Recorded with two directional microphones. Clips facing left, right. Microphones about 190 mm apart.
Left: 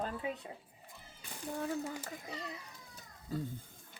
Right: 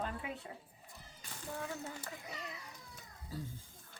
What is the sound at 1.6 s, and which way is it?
Speech, 30° left (ahead or behind).